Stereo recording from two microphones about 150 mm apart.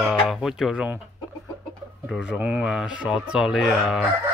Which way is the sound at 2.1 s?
5° right (ahead or behind).